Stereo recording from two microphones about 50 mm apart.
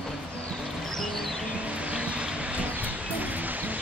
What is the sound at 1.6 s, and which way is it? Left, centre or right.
Music, right.